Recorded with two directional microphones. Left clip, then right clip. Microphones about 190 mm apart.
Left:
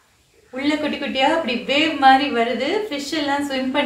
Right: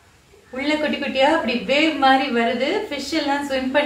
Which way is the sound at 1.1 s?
30° left (ahead or behind).